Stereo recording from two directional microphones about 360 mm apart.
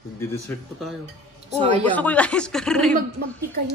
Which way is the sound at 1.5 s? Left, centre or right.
Centre.